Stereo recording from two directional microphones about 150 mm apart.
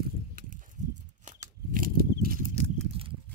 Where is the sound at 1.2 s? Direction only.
60° right (ahead or behind).